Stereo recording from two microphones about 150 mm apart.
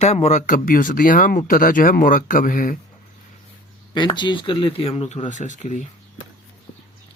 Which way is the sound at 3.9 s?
30° left (ahead or behind).